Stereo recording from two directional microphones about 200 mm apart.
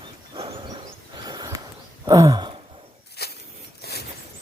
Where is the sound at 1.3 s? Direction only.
20° right (ahead or behind).